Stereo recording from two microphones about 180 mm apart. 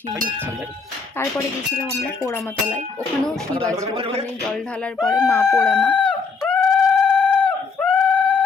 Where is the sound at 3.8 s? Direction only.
35° right (ahead or behind).